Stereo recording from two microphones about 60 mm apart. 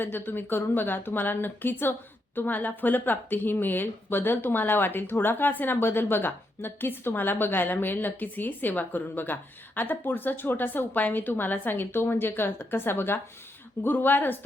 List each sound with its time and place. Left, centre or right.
0.0 s speech: left